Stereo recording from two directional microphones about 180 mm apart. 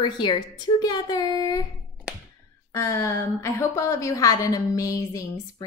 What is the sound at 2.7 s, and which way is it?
A woman's voice, 15° left (ahead or behind).